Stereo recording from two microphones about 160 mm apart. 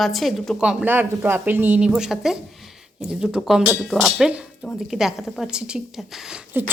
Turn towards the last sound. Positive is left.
turn(degrees=-5)  # may be behind; listen again after turning